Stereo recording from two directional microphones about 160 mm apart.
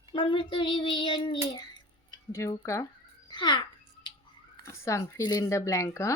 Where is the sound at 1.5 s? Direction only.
25° left (ahead or behind).